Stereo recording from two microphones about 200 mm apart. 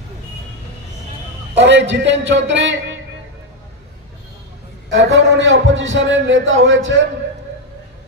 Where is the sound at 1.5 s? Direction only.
65° right (ahead or behind).